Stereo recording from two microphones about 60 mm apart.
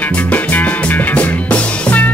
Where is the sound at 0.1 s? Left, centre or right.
Left.